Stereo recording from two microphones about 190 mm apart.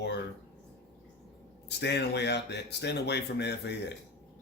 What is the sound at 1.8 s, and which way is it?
Speech, 65° left (ahead or behind).